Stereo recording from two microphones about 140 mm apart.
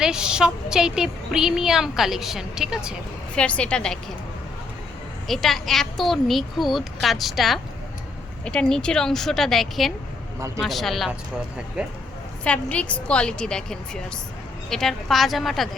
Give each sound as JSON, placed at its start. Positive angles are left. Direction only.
{"t": 0.0, "sound": "speech", "side_deg": -5}
{"t": 3.3, "sound": "a woman's voice", "side_deg": 10}
{"t": 5.3, "sound": "speech", "side_deg": 0}
{"t": 12.5, "sound": "a woman's voice", "side_deg": 10}